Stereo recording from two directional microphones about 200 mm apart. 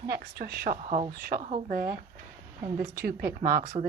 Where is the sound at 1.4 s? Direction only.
30° right (ahead or behind).